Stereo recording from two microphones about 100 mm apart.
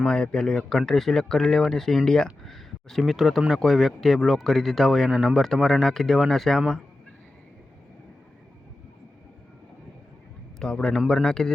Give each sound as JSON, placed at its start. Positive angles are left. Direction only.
{"t": 0.0, "sound": "speech", "side_deg": 10}
{"t": 10.6, "sound": "a man's voice", "side_deg": 10}